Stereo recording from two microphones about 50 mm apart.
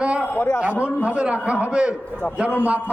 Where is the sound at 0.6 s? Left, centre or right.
Right.